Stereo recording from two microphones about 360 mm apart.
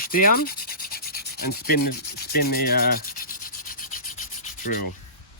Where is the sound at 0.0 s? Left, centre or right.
Left.